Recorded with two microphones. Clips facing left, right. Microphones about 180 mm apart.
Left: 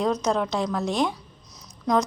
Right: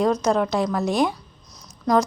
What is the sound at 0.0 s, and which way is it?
A woman's voice, centre (ahead or behind).